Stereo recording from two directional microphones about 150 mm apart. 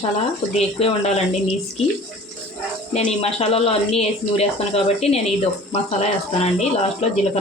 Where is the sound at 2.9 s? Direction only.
45° left (ahead or behind).